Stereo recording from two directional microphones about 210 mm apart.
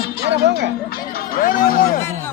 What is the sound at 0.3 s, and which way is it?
Music, 55° right (ahead or behind).